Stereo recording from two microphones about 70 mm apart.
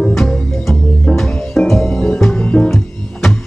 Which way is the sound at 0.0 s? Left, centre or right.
Centre.